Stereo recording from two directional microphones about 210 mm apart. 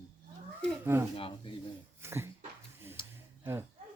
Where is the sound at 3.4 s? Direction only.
10° right (ahead or behind).